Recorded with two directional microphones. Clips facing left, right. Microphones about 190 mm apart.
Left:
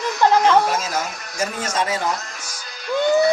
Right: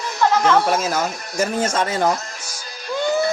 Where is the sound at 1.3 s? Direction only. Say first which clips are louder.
Right 3 dB; 50° right (ahead or behind).